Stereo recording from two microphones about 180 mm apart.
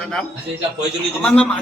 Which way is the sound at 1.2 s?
5° left (ahead or behind).